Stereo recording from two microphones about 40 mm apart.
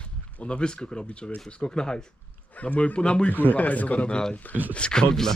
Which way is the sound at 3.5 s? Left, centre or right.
Left.